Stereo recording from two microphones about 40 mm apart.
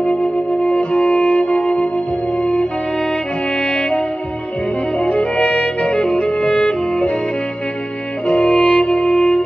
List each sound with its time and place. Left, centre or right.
0.0 s music: centre
5.0 s music: left
8.3 s music: left